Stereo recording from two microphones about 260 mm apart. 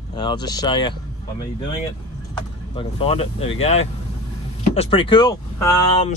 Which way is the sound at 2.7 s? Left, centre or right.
Centre.